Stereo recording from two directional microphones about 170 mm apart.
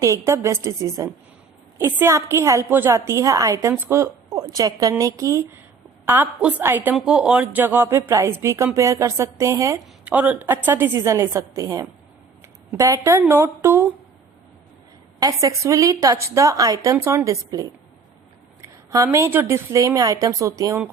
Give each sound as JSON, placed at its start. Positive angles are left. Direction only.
{"t": 0.0, "sound": "a woman's voice", "side_deg": -15}
{"t": 15.2, "sound": "a woman's voice", "side_deg": -20}